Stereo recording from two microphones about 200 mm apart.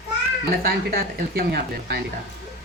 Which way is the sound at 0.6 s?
50° right (ahead or behind).